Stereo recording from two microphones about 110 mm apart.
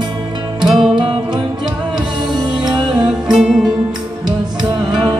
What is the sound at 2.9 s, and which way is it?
Music, 5° right (ahead or behind).